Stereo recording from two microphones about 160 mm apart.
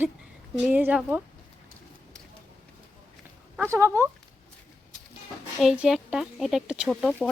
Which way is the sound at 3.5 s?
15° right (ahead or behind).